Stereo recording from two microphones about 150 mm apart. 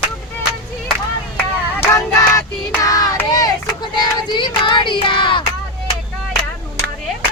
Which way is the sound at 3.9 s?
30° left (ahead or behind).